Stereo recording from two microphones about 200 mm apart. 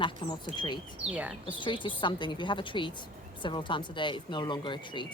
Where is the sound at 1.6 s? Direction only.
25° left (ahead or behind).